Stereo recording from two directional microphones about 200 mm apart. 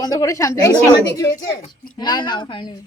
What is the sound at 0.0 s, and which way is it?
Speech, 20° left (ahead or behind).